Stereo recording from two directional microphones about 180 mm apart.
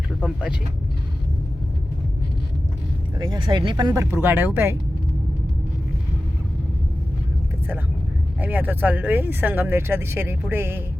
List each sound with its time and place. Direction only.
0.2 s speech: 5° right (ahead or behind)
3.2 s speech: 25° right (ahead or behind)
8.4 s speech: 10° right (ahead or behind)